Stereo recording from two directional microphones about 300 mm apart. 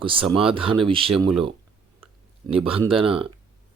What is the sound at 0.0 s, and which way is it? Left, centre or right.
Speech, centre.